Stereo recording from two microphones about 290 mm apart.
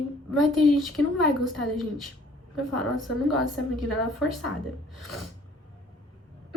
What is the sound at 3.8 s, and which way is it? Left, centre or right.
A woman's voice, centre.